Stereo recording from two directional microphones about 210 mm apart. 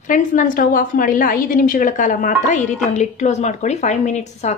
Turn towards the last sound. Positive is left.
turn(degrees=30)  # may be behind; listen again after turning